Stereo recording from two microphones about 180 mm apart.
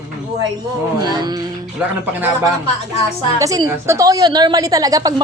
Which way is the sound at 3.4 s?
20° right (ahead or behind).